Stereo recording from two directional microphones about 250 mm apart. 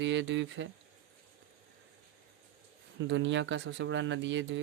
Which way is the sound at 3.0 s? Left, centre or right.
Right.